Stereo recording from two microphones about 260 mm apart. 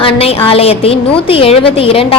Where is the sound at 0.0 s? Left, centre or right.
Left.